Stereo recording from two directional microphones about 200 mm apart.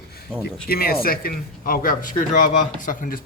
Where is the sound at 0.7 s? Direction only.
50° left (ahead or behind).